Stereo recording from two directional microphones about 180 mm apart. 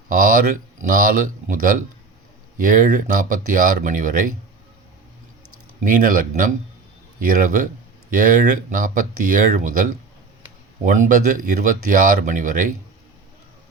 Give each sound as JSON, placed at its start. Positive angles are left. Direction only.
{"t": 0.1, "sound": "speech", "side_deg": -50}
{"t": 5.8, "sound": "speech", "side_deg": -50}